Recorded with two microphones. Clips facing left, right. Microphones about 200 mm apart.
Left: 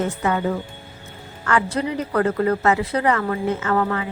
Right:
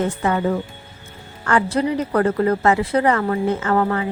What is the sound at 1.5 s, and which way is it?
A woman's voice, 35° right (ahead or behind).